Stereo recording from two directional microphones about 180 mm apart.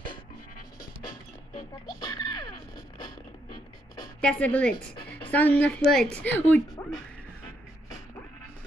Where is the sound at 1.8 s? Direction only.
20° left (ahead or behind).